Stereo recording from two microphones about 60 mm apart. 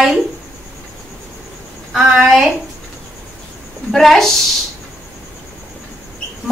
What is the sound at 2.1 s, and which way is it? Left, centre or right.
Speech, centre.